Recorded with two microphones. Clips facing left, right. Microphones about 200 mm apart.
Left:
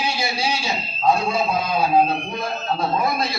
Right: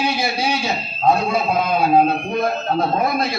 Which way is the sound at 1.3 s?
60° right (ahead or behind).